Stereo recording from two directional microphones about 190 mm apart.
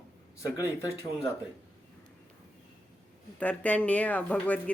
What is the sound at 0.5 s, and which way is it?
Speech, 20° left (ahead or behind).